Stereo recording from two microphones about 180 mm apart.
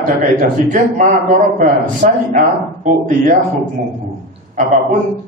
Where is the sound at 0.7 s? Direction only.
45° right (ahead or behind).